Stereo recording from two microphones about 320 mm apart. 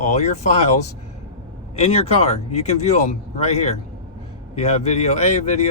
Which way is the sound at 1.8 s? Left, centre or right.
Centre.